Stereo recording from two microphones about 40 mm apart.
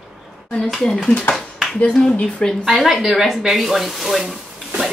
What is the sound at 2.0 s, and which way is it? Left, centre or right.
Speech, left.